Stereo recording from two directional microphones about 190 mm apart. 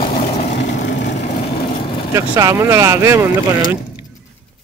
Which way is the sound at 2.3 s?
15° right (ahead or behind).